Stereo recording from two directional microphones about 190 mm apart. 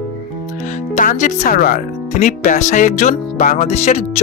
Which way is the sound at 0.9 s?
40° left (ahead or behind).